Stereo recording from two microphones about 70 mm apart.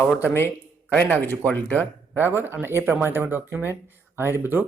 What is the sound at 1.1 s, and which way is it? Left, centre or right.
Speech, left.